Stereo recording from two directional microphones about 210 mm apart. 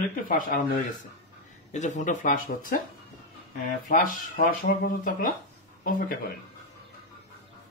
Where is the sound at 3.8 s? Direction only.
40° left (ahead or behind).